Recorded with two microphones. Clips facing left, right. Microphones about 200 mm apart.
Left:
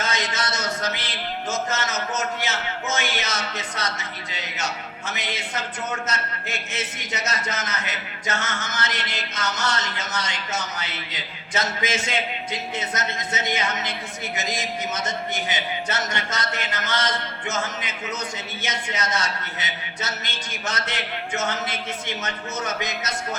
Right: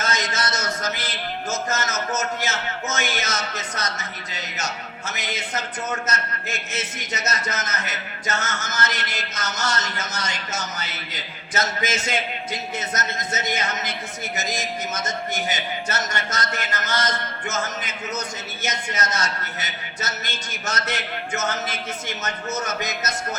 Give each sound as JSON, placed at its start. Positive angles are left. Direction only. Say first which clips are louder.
{"t": 0.0, "sound": "music", "louder": "right 1 dB", "side_deg": -45}
{"t": 18.6, "sound": "music", "louder": "right 2 dB", "side_deg": -45}